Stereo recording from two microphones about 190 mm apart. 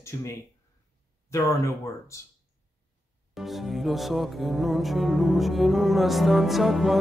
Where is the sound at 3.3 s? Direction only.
Centre (ahead or behind).